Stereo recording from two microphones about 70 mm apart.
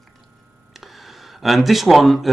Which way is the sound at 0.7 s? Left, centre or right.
Centre.